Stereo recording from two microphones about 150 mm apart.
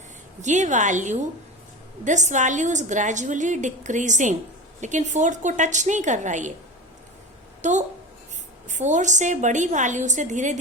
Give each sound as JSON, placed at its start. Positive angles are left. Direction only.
{"t": 0.4, "sound": "a woman's voice", "side_deg": -50}
{"t": 7.6, "sound": "a woman's voice", "side_deg": -50}